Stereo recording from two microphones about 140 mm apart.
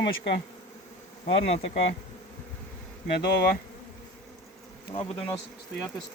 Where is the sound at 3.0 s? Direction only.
90° left.